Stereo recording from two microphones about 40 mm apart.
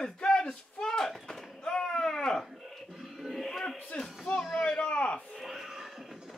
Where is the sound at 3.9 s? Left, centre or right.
Left.